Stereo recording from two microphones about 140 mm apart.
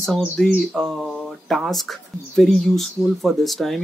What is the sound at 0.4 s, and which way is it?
Speech, centre (ahead or behind).